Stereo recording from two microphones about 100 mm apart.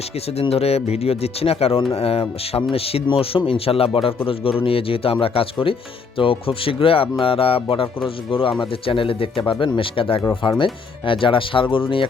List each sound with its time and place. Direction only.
0.3 s speech: 85° left; by 12.0 s 60° left (ahead or behind)